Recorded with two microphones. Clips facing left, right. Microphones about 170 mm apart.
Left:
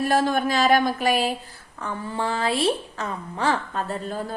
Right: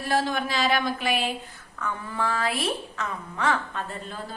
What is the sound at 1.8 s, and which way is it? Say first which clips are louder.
A woman's voice: left 2 dB; 30° left (ahead or behind).